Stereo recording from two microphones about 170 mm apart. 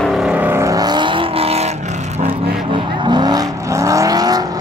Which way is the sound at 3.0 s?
25° right (ahead or behind).